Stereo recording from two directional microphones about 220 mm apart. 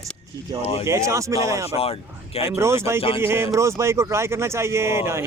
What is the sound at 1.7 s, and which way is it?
Speech, 25° left (ahead or behind).